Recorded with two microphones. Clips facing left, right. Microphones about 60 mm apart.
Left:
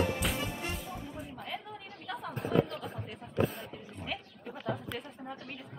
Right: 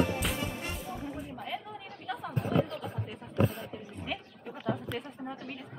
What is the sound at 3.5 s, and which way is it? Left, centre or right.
Wild animals, centre.